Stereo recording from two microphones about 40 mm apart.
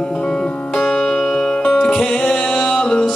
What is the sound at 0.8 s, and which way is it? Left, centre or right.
Music, centre.